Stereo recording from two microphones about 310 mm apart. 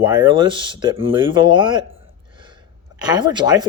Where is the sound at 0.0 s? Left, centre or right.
Centre.